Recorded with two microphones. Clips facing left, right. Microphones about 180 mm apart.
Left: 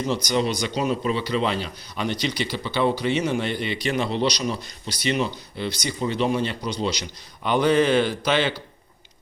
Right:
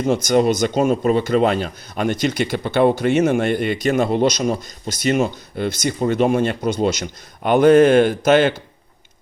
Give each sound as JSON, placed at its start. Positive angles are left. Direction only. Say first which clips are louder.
{"t": 0.0, "sound": "speech", "louder": "right 7 dB", "side_deg": -50}